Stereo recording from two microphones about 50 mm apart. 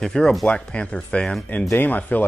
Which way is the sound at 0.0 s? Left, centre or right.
Centre.